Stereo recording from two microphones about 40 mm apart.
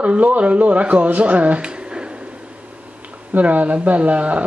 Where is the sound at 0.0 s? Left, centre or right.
Right.